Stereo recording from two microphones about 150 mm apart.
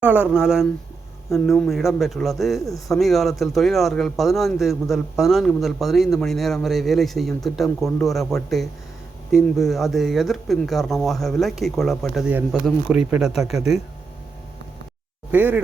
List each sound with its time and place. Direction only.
0.0 s speech: 10° right (ahead or behind)
2.6 s a man's voice: 25° left (ahead or behind)
2.9 s speech: centre (ahead or behind)
15.3 s speech: 10° right (ahead or behind)